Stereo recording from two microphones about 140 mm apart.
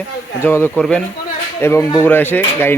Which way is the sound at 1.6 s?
20° left (ahead or behind).